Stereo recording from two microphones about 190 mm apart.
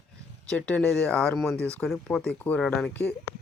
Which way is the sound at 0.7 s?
5° left (ahead or behind).